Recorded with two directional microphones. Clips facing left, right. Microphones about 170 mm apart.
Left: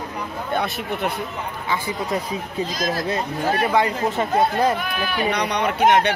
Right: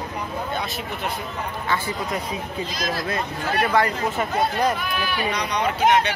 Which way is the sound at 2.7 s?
45° left (ahead or behind).